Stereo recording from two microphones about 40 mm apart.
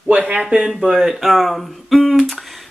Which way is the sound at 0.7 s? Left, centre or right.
Centre.